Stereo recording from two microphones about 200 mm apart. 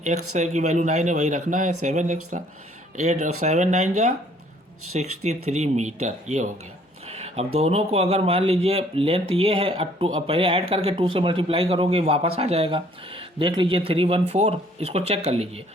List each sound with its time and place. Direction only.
0.3 s speech: 35° right (ahead or behind)
5.2 s speech: 35° right (ahead or behind)
7.1 s a sound: 30° right (ahead or behind)
7.6 s speech: 30° right (ahead or behind)